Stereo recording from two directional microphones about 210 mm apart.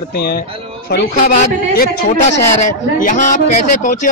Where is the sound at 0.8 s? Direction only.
50° left (ahead or behind).